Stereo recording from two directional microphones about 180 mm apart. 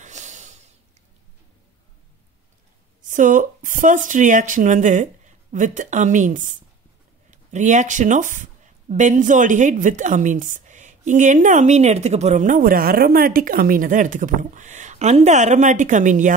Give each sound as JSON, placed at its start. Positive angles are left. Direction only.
{"t": 0.0, "sound": "snort", "side_deg": -40}
{"t": 3.0, "sound": "speech", "side_deg": -45}